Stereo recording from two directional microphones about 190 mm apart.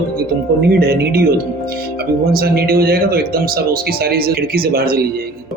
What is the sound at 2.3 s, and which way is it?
A man's voice, 55° right (ahead or behind).